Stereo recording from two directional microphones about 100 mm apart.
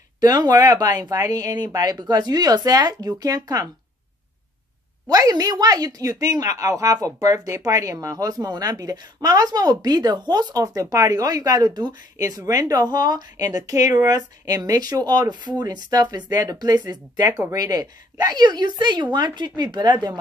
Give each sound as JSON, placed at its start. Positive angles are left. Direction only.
{"t": 0.2, "sound": "speech", "side_deg": -40}
{"t": 5.0, "sound": "speech", "side_deg": -40}